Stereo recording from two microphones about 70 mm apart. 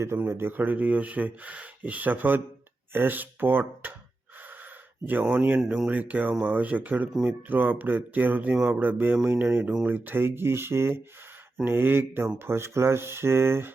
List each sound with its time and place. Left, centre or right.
0.3 s speech: right
5.2 s speech: right
5.5 s speech: centre
5.9 s speech: right